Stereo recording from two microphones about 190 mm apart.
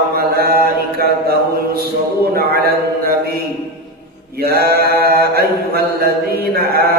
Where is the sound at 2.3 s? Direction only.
55° right (ahead or behind).